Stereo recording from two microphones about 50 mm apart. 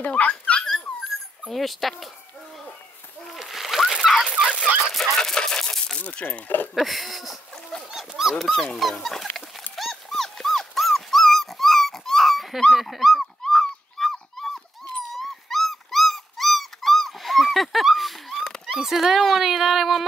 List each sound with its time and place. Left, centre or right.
0.0 s dog: left
1.5 s speech: centre
3.3 s splash: centre
4.2 s fowl: centre
4.9 s a sound: centre
5.9 s speech: left
6.7 s speech: centre
7.9 s dog: centre
8.4 s speech: centre
9.8 s dog: centre
18.7 s speech: centre